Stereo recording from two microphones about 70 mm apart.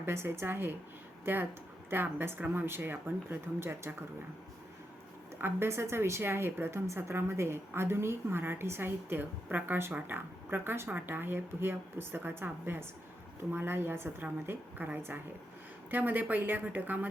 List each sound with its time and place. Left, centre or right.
0.0 s speech: right
5.4 s speech: right